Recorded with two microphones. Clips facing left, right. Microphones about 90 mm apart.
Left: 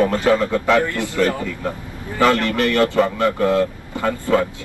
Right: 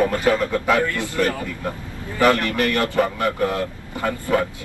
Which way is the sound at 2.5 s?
20° left (ahead or behind).